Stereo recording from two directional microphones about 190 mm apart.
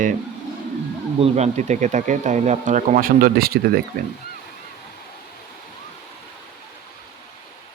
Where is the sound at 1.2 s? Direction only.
35° right (ahead or behind); by 3.8 s 50° right (ahead or behind).